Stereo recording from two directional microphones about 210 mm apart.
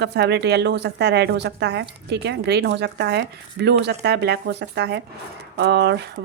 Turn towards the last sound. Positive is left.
turn(degrees=-50)  # may be behind; listen again after turning